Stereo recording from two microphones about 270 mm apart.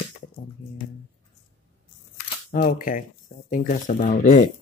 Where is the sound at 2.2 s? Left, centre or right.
Left.